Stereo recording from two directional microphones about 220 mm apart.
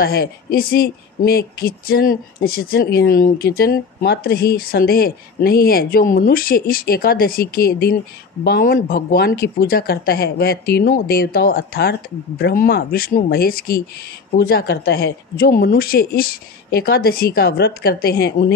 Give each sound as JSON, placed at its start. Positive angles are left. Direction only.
{"t": 0.0, "sound": "speech", "side_deg": 45}